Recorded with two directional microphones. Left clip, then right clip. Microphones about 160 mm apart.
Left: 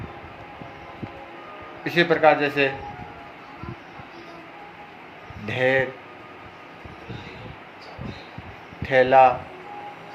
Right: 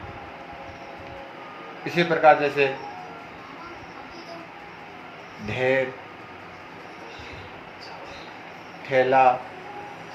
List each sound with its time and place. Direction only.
1.8 s a man's voice: 70° left (ahead or behind)
5.5 s speech: 70° left (ahead or behind)
8.9 s a man's voice: 70° left (ahead or behind)